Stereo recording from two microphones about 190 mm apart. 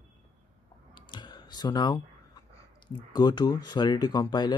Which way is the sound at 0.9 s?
25° left (ahead or behind).